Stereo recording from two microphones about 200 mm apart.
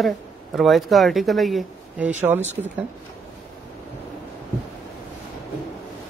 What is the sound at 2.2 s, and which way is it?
Speech, 10° right (ahead or behind).